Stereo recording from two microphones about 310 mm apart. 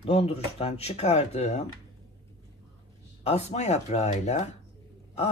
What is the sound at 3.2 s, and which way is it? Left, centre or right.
Speech, left.